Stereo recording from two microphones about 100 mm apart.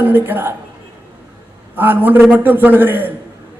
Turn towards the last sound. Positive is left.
turn(degrees=-20)  # may be behind; listen again after turning